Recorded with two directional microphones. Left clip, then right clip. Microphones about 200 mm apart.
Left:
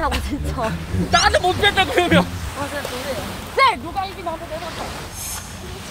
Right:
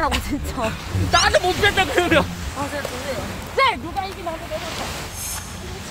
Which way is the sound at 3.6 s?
25° left (ahead or behind).